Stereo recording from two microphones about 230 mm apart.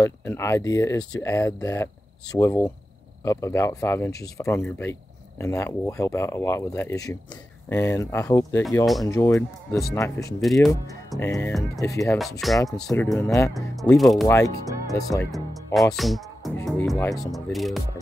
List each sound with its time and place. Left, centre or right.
0.0 s speech: centre
10.4 s speech: centre
12.2 s speech: centre
14.2 s speech: centre
15.3 s music: centre
16.6 s speech: centre
16.9 s speech: centre
17.2 s speech: centre